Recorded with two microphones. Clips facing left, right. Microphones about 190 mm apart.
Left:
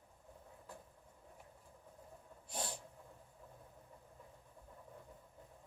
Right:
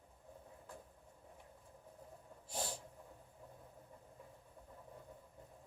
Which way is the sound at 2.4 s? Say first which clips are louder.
Right 1 dB; 25° right (ahead or behind).